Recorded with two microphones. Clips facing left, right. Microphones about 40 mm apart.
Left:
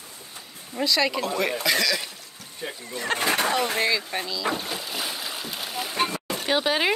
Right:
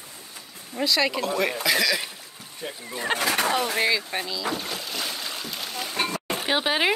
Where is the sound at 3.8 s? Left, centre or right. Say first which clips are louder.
Right 1 dB; centre.